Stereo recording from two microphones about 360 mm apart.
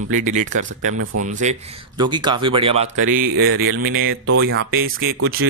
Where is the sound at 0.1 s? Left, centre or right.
Right.